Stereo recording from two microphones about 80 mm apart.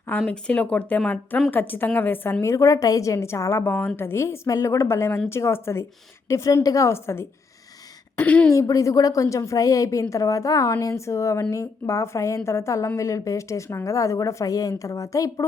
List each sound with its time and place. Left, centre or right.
0.3 s a woman's voice: centre
2.4 s a woman's voice: left
3.6 s a woman's voice: left
4.4 s a woman's voice: left
8.2 s speech: centre
8.5 s a woman's voice: left